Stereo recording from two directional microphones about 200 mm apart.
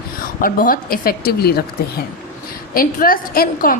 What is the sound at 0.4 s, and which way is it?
A woman's voice, 45° left (ahead or behind).